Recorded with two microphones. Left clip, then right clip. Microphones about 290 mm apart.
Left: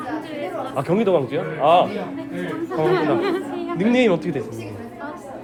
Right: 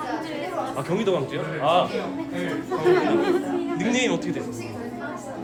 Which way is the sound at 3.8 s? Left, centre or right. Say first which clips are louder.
Left 8 dB; centre.